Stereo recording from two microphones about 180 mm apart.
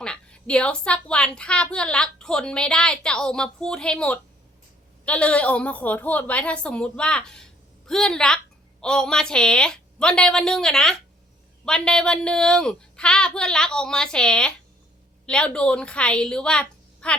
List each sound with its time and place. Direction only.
0.0 s a woman's voice: 5° left (ahead or behind)